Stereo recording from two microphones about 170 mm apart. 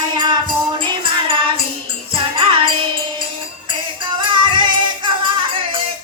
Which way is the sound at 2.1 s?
30° right (ahead or behind).